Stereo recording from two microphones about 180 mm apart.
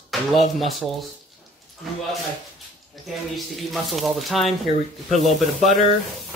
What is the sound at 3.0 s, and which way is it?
Speech, centre (ahead or behind).